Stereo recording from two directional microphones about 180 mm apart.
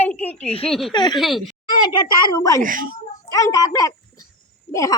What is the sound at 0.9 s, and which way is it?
Speech, 25° left (ahead or behind).